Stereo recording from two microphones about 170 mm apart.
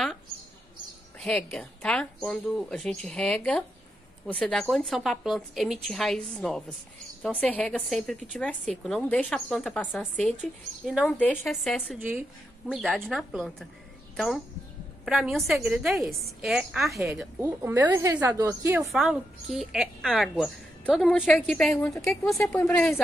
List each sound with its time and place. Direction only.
1.2 s a woman's voice: 5° left (ahead or behind)
12.0 s speech: 10° right (ahead or behind)
12.7 s a woman's voice: centre (ahead or behind)
17.4 s a woman's voice: 15° right (ahead or behind)
18.8 s a woman's voice: centre (ahead or behind)